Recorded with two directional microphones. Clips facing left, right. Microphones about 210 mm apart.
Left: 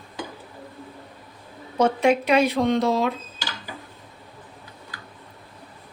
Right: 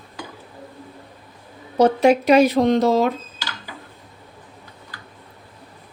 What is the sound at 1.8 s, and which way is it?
A woman's voice, 40° right (ahead or behind).